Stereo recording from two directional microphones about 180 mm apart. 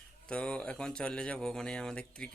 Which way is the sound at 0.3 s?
5° left (ahead or behind).